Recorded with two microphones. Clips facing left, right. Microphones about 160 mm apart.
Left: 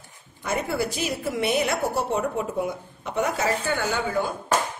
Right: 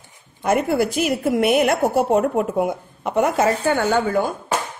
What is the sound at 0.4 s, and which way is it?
A woman's voice, 55° right (ahead or behind).